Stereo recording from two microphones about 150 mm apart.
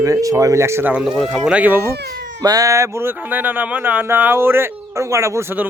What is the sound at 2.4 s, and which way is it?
Speech, 25° right (ahead or behind).